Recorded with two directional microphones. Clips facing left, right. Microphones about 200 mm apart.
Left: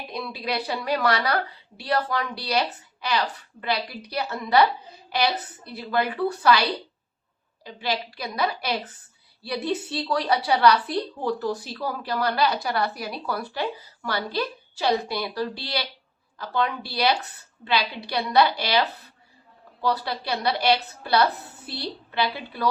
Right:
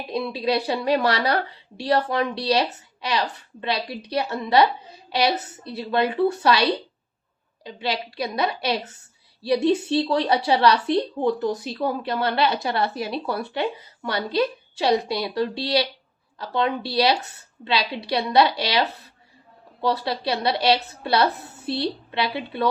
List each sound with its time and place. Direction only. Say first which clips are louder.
0.1 s a woman's voice: right 7 dB; 25° right (ahead or behind)